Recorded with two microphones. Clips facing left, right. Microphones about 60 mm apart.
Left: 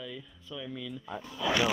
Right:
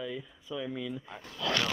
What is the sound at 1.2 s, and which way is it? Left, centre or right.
Speech, centre.